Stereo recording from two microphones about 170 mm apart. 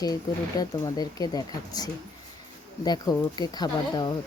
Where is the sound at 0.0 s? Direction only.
20° left (ahead or behind).